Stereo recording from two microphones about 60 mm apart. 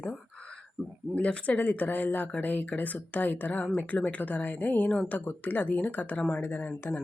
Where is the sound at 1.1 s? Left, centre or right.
Centre.